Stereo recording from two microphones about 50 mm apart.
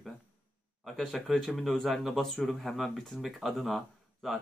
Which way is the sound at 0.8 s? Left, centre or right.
Centre.